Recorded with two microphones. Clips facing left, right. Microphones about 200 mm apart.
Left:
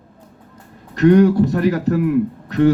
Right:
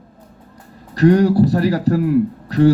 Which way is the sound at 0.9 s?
35° right (ahead or behind).